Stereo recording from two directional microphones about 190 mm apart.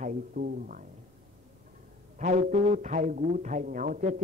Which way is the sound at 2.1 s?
40° right (ahead or behind).